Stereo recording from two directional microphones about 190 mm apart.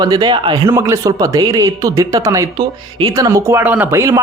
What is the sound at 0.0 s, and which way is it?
Speech, 20° right (ahead or behind).